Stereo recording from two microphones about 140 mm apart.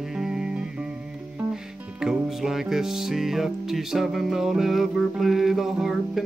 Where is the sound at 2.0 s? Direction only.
5° right (ahead or behind).